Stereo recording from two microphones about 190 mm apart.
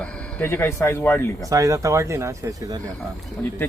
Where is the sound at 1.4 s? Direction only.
15° right (ahead or behind).